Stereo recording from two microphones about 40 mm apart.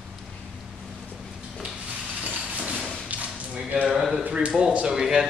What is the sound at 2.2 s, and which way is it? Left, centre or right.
Vehicle, right.